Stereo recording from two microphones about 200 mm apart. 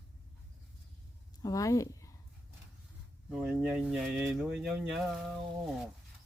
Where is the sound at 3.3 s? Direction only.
5° right (ahead or behind).